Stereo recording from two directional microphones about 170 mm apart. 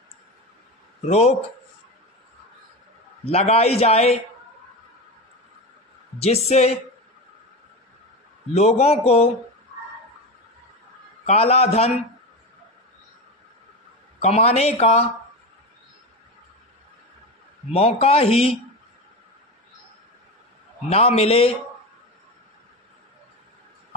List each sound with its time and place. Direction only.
1.0 s a man's voice: 35° left (ahead or behind)
3.3 s a man's voice: 35° left (ahead or behind)
6.1 s a man's voice: 40° left (ahead or behind)
8.5 s a man's voice: 40° left (ahead or behind)
11.2 s a man's voice: 35° left (ahead or behind)
14.2 s a man's voice: 35° left (ahead or behind)
17.7 s a man's voice: 35° left (ahead or behind)
20.9 s a man's voice: 35° left (ahead or behind)